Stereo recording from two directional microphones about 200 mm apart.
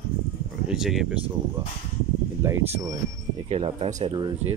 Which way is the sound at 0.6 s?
Centre (ahead or behind).